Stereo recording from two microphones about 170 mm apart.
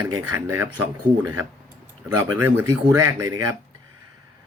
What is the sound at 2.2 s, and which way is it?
Speech, 10° right (ahead or behind).